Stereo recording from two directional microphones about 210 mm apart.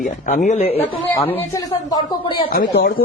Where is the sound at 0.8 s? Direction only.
10° left (ahead or behind).